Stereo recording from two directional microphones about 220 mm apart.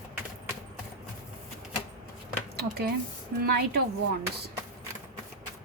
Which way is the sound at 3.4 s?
45° right (ahead or behind).